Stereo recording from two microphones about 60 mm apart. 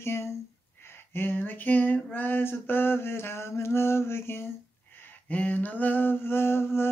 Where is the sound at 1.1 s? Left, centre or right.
Left.